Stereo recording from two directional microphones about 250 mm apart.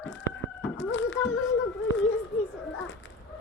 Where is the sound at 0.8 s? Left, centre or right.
Left.